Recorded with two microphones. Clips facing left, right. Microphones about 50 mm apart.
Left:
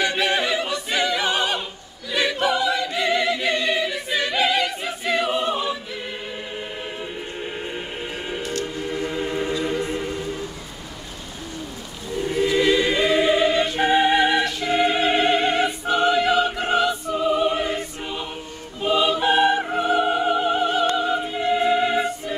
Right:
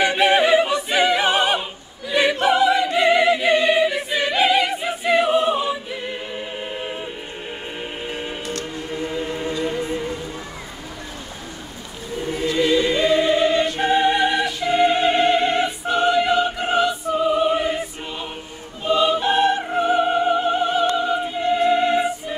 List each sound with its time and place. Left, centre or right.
0.0 s choir: right
9.1 s chant: centre
12.3 s choir: centre
14.4 s music: centre
18.8 s choir: centre
19.8 s music: centre
20.9 s opera: centre
21.3 s music: centre